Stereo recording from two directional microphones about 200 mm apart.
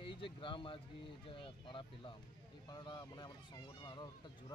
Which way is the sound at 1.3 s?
25° left (ahead or behind).